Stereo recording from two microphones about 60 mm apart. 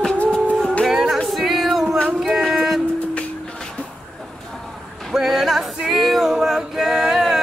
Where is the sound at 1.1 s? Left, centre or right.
Centre.